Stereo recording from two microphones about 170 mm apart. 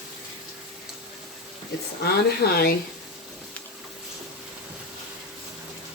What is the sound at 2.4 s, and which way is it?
Speech, 65° left (ahead or behind).